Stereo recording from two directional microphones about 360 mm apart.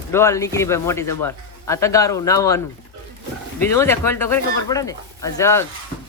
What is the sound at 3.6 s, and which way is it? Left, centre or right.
A man's voice, centre.